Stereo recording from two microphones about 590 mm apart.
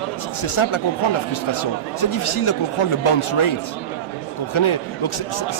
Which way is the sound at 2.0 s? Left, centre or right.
Left.